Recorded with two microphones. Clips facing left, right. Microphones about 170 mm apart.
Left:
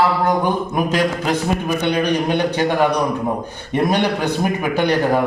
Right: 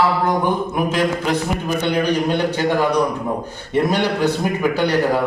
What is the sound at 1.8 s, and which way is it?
A man's voice, 15° left (ahead or behind).